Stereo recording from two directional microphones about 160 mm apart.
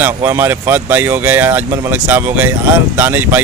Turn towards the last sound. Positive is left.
turn(degrees=-10)  # may be behind; listen again after turning